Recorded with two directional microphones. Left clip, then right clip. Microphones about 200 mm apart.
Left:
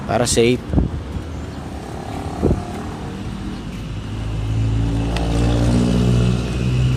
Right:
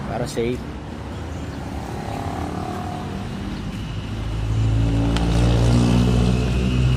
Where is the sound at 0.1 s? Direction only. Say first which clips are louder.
Left 9 dB; 45° left (ahead or behind).